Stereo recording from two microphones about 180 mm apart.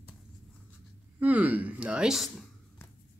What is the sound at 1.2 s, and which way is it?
Speech, 10° right (ahead or behind).